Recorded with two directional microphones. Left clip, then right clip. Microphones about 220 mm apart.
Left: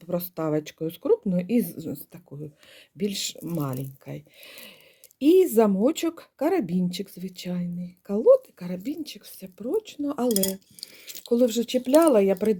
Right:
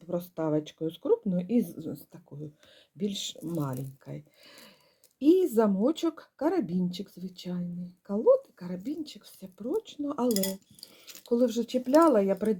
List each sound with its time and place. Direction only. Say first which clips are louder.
0.0 s speech: left 3 dB; 30° left (ahead or behind)
10.8 s speech: left 7 dB; 10° left (ahead or behind)
11.3 s speech: left 4 dB; 30° left (ahead or behind)